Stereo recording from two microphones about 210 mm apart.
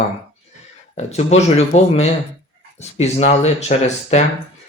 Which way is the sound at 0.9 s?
30° left (ahead or behind).